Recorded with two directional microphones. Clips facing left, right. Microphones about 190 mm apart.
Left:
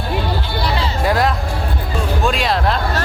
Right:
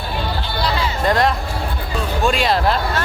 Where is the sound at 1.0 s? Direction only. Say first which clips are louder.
Even; 5° left (ahead or behind).